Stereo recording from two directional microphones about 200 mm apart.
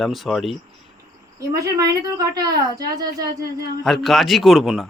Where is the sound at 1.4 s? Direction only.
15° right (ahead or behind).